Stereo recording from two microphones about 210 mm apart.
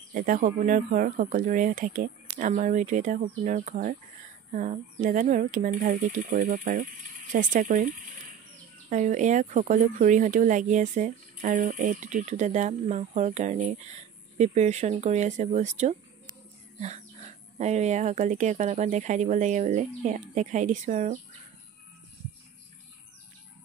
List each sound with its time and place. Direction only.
0.1 s speech: 40° right (ahead or behind)
17.6 s speech: 30° right (ahead or behind)